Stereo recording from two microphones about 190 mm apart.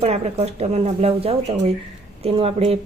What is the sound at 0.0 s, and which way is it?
Speech, 35° right (ahead or behind).